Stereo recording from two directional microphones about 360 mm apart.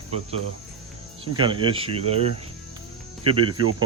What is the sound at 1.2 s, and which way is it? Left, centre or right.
Speech, centre.